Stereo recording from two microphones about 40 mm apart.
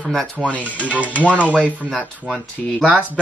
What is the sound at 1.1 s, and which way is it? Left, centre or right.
Speech, right.